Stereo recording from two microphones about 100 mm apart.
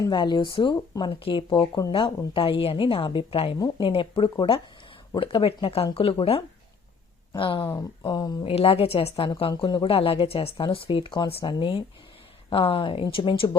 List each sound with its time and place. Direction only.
0.1 s speech: 45° left (ahead or behind); by 3.6 s 70° left (ahead or behind)
3.8 s speech: 55° left (ahead or behind); by 6.4 s 75° left (ahead or behind)
7.3 s speech: 60° left (ahead or behind)
8.0 s speech: 45° left (ahead or behind)
8.4 s a woman's voice: 70° left (ahead or behind)
9.5 s speech: 50° left (ahead or behind)